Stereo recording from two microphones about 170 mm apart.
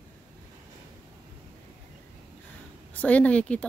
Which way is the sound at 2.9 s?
10° left (ahead or behind).